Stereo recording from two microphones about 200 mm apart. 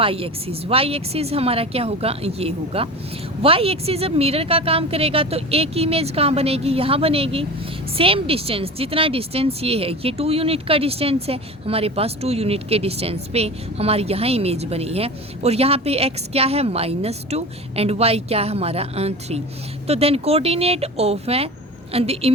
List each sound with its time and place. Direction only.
0.0 s a woman's voice: 30° right (ahead or behind)